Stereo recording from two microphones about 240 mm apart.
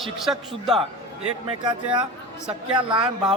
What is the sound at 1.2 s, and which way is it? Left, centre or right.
Speech, right.